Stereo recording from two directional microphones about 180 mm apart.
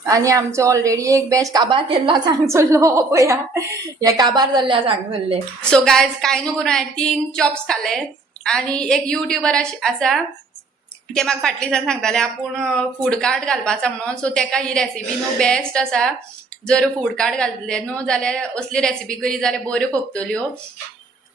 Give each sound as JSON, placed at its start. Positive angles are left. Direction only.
{"t": 0.0, "sound": "a woman's voice", "side_deg": -15}
{"t": 5.7, "sound": "a woman's voice", "side_deg": 5}